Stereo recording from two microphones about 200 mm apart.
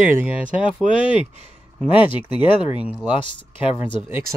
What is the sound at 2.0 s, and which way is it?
Speech, 25° left (ahead or behind).